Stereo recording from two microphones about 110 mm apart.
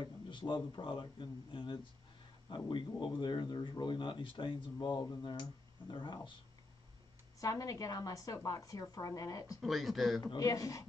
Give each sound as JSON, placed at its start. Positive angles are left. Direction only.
{"t": 0.0, "sound": "speech", "side_deg": 45}
{"t": 7.3, "sound": "a woman's voice", "side_deg": 30}
{"t": 9.6, "sound": "speech", "side_deg": 0}
{"t": 10.2, "sound": "a woman's voice", "side_deg": 35}